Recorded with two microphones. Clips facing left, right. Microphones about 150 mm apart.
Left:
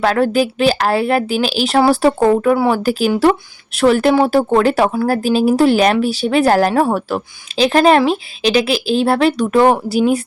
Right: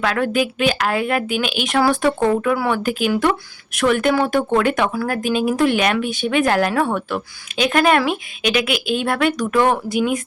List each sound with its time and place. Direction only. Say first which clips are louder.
0.0 s speech: left 5 dB; 35° left (ahead or behind)